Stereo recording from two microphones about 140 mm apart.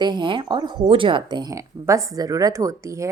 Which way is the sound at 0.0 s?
35° right (ahead or behind).